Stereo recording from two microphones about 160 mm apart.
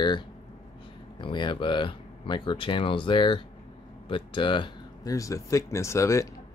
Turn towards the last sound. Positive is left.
turn(degrees=20)  # may be behind; listen again after turning